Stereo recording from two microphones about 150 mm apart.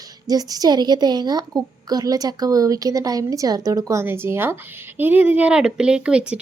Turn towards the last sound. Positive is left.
turn(degrees=-5)  # may be behind; listen again after turning